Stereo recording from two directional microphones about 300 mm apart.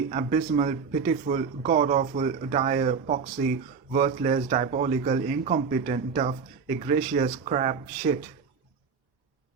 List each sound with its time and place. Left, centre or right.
0.1 s a man's voice: right